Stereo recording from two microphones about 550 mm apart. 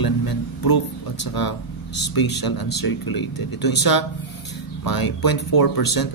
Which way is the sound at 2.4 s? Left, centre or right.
Left.